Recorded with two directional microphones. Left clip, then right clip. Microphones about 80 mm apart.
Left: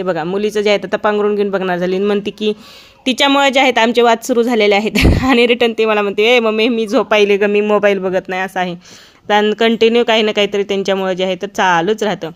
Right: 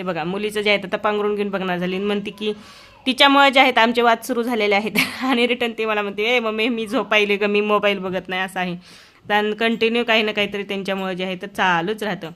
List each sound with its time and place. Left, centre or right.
0.0 s speech: left
5.5 s speech: left
7.3 s speech: centre
7.8 s a man's voice: left
8.3 s speech: left